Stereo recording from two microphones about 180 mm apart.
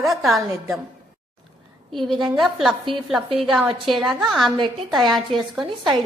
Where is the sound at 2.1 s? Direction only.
25° right (ahead or behind).